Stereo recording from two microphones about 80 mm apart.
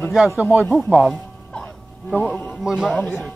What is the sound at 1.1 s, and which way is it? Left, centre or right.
Music, centre.